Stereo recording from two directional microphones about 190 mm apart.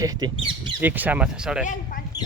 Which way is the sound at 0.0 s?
20° right (ahead or behind).